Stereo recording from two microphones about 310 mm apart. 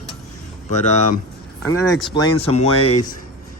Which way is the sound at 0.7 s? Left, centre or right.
Left.